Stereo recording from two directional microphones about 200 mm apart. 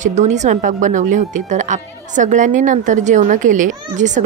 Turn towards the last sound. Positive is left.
turn(degrees=-35)  # may be behind; listen again after turning